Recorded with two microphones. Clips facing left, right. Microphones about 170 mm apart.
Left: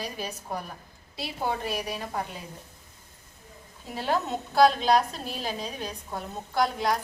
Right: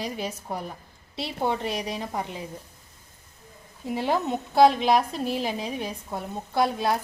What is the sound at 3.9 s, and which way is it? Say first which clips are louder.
A woman's voice: right 3 dB; 20° right (ahead or behind).